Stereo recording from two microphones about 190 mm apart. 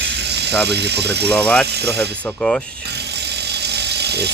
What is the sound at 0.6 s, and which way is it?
Speech, 60° right (ahead or behind).